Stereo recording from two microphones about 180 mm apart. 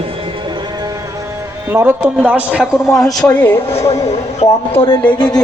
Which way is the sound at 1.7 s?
10° right (ahead or behind).